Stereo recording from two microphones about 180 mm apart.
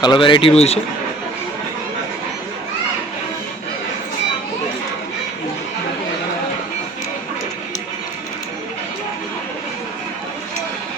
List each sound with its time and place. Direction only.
0.0 s a man's voice: 25° left (ahead or behind)